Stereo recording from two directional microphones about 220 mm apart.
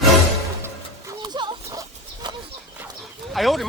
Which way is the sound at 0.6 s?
15° right (ahead or behind).